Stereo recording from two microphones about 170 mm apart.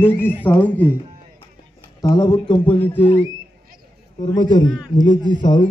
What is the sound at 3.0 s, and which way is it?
Speech, 35° left (ahead or behind).